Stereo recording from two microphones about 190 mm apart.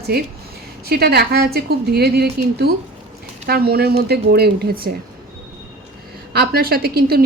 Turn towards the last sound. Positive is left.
turn(degrees=-55)  # may be behind; listen again after turning